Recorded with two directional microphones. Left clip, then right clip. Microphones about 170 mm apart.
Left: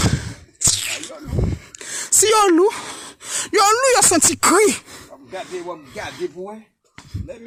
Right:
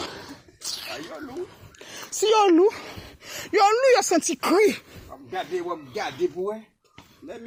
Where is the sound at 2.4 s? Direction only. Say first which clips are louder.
Left 3 dB; 30° left (ahead or behind).